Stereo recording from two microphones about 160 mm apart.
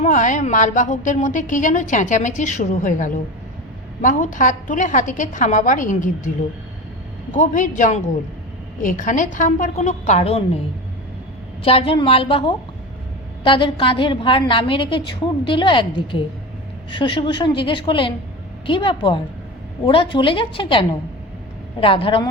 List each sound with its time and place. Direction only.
0.0 s a woman's voice: 50° left (ahead or behind)
11.6 s a woman's voice: 35° left (ahead or behind)